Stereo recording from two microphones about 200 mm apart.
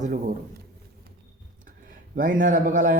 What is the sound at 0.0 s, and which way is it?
Speech, 40° right (ahead or behind).